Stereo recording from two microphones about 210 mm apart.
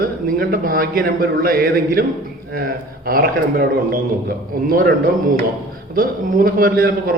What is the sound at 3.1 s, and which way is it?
A man's voice, 45° right (ahead or behind).